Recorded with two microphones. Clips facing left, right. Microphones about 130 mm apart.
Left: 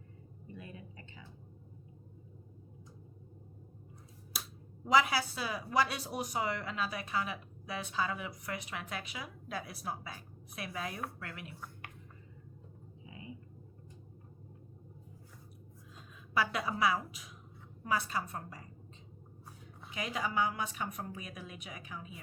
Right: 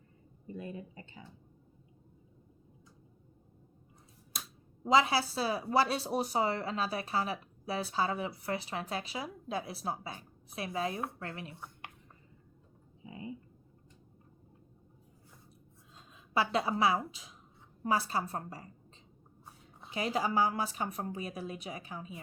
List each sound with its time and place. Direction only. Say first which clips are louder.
0.4 s speech: right 7 dB; 35° right (ahead or behind)
4.9 s speech: right 2 dB; 30° right (ahead or behind)
13.1 s a sound: right 6 dB; 30° right (ahead or behind)
16.3 s a woman's voice: right 3 dB; 30° right (ahead or behind)
19.8 s speech: right 5 dB; 30° right (ahead or behind)